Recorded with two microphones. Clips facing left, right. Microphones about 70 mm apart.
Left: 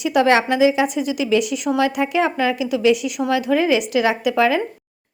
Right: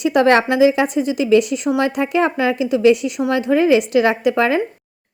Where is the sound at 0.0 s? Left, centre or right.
Right.